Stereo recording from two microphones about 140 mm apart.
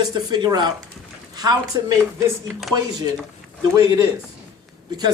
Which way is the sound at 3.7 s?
25° right (ahead or behind).